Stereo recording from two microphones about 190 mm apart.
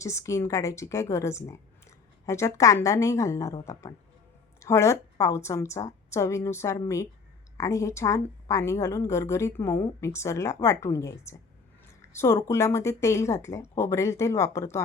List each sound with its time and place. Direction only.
0.0 s a woman's voice: 15° left (ahead or behind)